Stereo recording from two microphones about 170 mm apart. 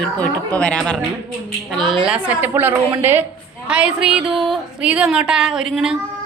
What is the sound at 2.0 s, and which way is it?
A woman's voice, 10° right (ahead or behind).